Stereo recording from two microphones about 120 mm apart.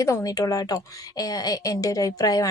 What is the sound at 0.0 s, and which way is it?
A woman's voice, 30° left (ahead or behind).